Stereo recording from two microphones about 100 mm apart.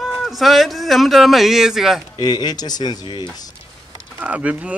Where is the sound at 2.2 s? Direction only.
45° left (ahead or behind).